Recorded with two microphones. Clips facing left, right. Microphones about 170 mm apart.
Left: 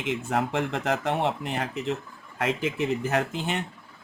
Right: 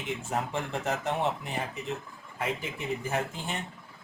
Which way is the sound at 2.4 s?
90° left.